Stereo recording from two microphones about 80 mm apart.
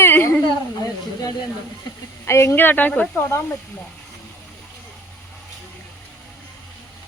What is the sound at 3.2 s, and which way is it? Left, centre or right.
Speech, left.